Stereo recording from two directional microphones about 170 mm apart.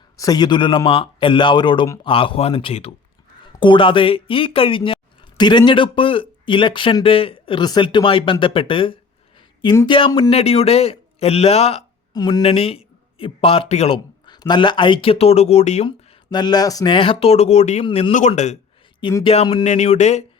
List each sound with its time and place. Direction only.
0.2 s a man's voice: 25° left (ahead or behind)
12.1 s a man's voice: 25° left (ahead or behind)
12.5 s speech: 35° left (ahead or behind)
15.9 s speech: 25° left (ahead or behind)
17.8 s a man's voice: 30° left (ahead or behind)
18.1 s speech: 45° left (ahead or behind)
18.9 s a man's voice: 25° left (ahead or behind)